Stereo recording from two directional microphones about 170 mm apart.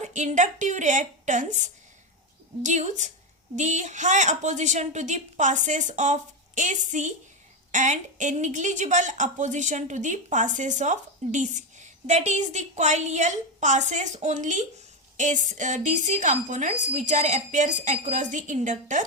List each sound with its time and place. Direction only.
0.0 s a woman's voice: 45° right (ahead or behind)